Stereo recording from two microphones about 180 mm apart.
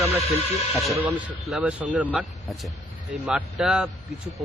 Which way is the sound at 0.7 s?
Centre (ahead or behind).